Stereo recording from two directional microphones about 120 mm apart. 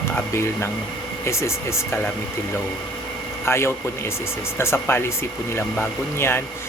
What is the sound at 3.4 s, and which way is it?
A man's voice, 20° left (ahead or behind).